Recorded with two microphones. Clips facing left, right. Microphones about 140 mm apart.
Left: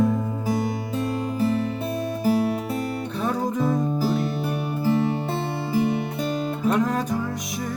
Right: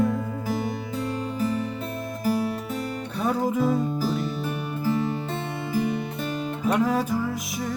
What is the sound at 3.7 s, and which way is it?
Music, 20° left (ahead or behind).